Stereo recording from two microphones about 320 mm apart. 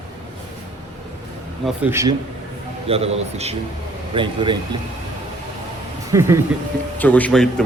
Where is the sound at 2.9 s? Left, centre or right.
Centre.